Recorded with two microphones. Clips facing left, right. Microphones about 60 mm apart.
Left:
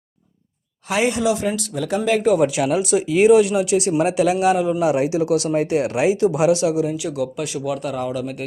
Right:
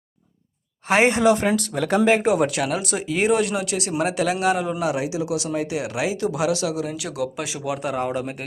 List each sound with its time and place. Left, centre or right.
0.9 s speech: right
1.7 s speech: right
2.4 s speech: centre
3.6 s speech: centre
4.5 s speech: centre
4.9 s speech: left
6.7 s speech: centre
7.9 s speech: right